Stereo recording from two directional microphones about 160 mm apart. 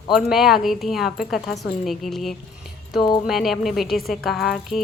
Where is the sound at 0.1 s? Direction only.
5° right (ahead or behind).